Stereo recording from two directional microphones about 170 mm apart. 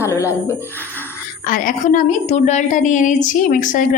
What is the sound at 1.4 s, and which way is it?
A woman's voice, 55° left (ahead or behind).